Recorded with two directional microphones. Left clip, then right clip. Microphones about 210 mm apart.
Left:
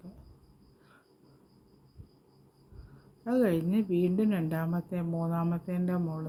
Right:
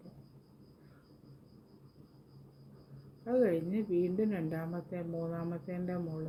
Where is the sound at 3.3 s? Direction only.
55° left (ahead or behind).